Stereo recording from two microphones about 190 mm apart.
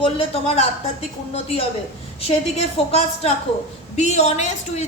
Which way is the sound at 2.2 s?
35° left (ahead or behind).